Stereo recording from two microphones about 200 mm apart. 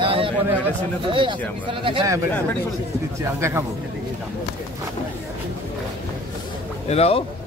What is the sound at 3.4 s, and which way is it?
Speech, 15° right (ahead or behind).